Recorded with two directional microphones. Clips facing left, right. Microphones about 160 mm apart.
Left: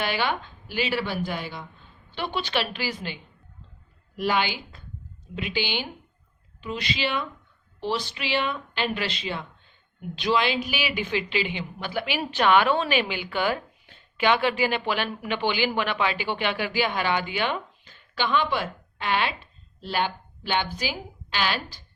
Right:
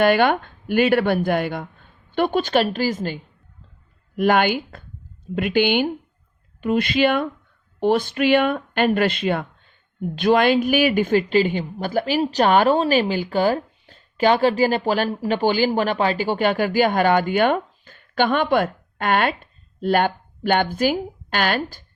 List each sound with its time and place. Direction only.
0.0 s speech: 55° right (ahead or behind)
4.2 s a woman's voice: 55° right (ahead or behind)